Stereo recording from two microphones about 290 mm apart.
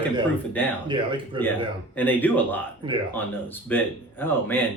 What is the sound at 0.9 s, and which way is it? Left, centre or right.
Speech, centre.